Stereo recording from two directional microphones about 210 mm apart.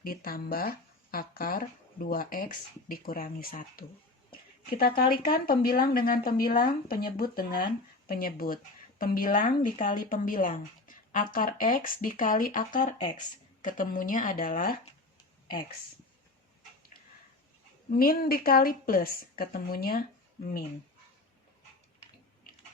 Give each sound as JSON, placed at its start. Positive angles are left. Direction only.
{"t": 0.0, "sound": "speech", "side_deg": 45}
{"t": 17.9, "sound": "speech", "side_deg": 45}
{"t": 22.5, "sound": "biting", "side_deg": 40}